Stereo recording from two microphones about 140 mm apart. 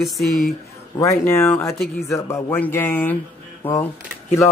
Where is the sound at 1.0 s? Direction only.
20° left (ahead or behind).